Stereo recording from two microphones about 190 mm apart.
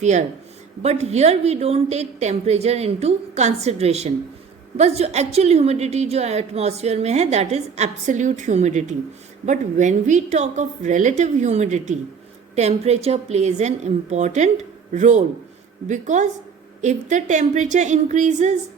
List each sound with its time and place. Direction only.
0.0 s a woman's voice: 35° right (ahead or behind)